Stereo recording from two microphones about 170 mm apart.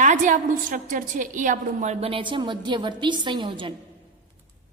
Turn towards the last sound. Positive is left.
turn(degrees=-30)  # may be behind; listen again after turning